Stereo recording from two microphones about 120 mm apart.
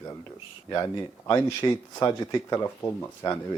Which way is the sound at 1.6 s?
35° left (ahead or behind).